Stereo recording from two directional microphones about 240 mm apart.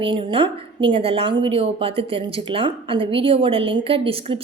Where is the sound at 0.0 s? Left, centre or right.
Right.